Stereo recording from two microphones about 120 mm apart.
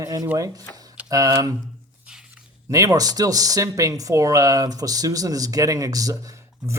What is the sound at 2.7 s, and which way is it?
Speech, 30° right (ahead or behind).